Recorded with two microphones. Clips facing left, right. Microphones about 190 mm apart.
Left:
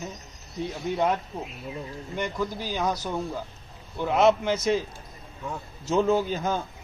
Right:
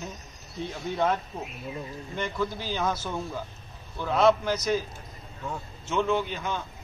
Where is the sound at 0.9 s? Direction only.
15° left (ahead or behind).